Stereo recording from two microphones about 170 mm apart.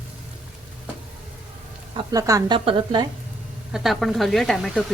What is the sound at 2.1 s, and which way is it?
Speech, 20° right (ahead or behind).